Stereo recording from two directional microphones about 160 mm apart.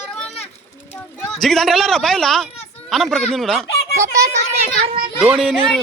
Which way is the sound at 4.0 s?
20° right (ahead or behind).